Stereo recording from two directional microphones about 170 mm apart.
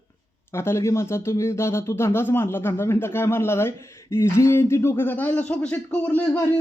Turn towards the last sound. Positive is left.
turn(degrees=10)  # may be behind; listen again after turning